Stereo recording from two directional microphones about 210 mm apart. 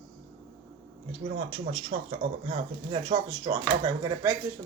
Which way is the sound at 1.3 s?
35° right (ahead or behind).